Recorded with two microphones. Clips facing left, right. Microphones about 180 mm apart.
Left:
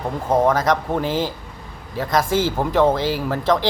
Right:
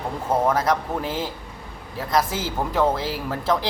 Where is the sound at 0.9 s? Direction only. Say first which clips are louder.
Left 5 dB; 30° left (ahead or behind).